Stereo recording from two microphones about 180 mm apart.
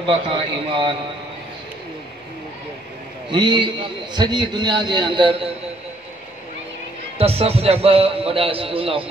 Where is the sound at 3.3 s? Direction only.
25° right (ahead or behind).